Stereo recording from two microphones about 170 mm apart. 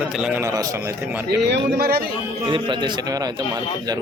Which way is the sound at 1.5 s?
65° right (ahead or behind).